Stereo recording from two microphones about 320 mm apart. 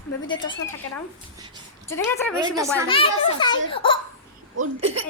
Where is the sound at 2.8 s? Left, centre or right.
Centre.